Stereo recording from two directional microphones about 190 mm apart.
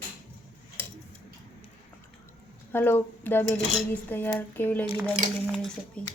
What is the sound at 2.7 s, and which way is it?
Speech, 10° left (ahead or behind).